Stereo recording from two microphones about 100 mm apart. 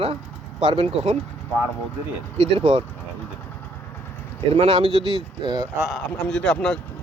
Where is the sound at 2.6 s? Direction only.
90° right.